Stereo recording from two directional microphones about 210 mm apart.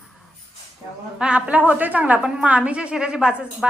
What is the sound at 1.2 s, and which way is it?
A woman's voice, 5° right (ahead or behind).